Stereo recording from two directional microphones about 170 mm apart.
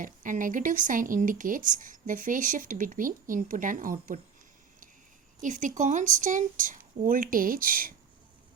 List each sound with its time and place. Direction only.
0.0 s speech: 50° right (ahead or behind)
5.4 s speech: 45° right (ahead or behind)